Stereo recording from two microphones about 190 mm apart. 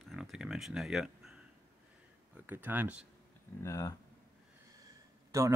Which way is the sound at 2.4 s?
10° right (ahead or behind).